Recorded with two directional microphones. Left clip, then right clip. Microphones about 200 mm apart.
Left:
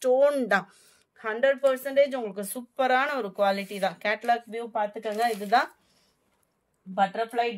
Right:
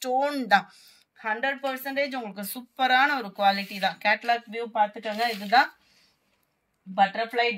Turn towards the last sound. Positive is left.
turn(degrees=60)  # may be behind; listen again after turning